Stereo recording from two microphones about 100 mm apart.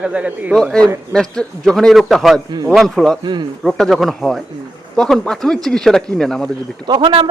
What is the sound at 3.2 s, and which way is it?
Speech, 50° right (ahead or behind).